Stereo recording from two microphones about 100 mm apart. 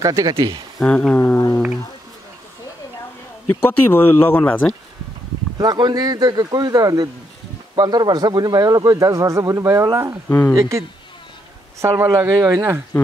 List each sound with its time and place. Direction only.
0.0 s speech: 35° right (ahead or behind)
0.7 s speech: 10° left (ahead or behind)
3.6 s speech: 20° left (ahead or behind)
5.6 s a man's voice: 45° right (ahead or behind); by 10.1 s 30° right (ahead or behind)
10.2 s speech: 20° left (ahead or behind)
10.6 s speech: 30° right (ahead or behind)